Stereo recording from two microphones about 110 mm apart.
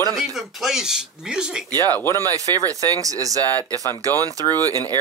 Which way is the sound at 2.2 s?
35° right (ahead or behind).